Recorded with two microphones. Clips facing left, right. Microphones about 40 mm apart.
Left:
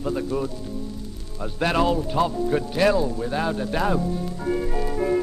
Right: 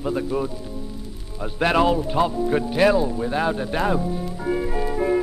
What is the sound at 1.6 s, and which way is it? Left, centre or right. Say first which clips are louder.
Speech: right 3 dB; centre.